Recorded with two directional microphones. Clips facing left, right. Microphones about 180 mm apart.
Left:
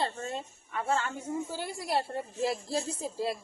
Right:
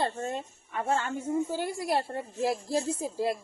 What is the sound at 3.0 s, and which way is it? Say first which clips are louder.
Speech: right 3 dB; 50° right (ahead or behind).